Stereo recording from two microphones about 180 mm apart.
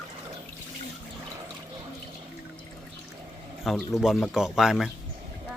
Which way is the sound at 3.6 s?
Centre (ahead or behind).